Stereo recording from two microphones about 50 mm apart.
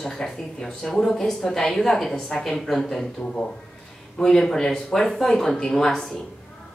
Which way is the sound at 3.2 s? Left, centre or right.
Centre.